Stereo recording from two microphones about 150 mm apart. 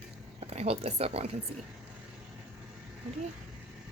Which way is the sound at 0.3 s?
45° right (ahead or behind).